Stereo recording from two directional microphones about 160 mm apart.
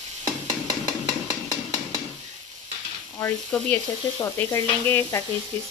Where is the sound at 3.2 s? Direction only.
15° left (ahead or behind).